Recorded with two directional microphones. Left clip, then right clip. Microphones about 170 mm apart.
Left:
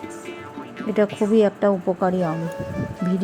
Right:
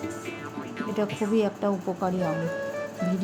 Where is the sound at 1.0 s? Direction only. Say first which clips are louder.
Left 8 dB; 25° left (ahead or behind).